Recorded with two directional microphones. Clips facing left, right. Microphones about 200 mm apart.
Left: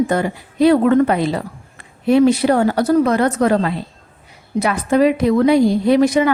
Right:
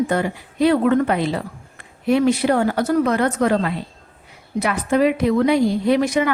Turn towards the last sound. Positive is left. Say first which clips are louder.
# left 4 dB
turn(degrees=35)  # may be behind; listen again after turning